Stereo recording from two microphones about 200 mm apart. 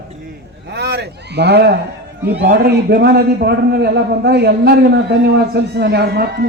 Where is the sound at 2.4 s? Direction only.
55° right (ahead or behind).